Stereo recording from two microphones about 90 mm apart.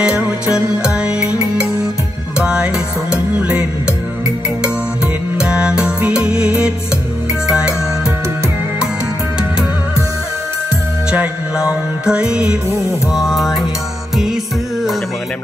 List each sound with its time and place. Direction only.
0.5 s music: 10° right (ahead or behind)
5.4 s music: 10° right (ahead or behind)
11.1 s music: 10° right (ahead or behind)